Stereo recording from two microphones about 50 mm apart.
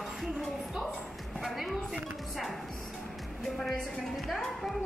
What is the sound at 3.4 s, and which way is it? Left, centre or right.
A woman's voice, centre.